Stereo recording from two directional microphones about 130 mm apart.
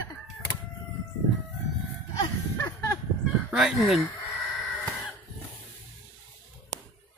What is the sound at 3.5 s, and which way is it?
Speech, 5° right (ahead or behind).